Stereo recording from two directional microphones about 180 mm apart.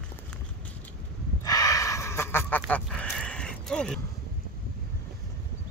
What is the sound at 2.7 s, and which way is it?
Crow, 5° left (ahead or behind).